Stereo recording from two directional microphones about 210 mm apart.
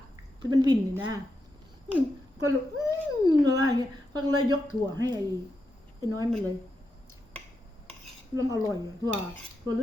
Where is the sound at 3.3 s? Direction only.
20° right (ahead or behind).